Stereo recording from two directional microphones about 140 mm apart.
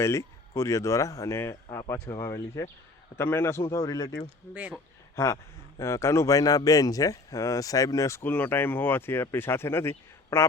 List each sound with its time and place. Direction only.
0.0 s a man's voice: 20° left (ahead or behind)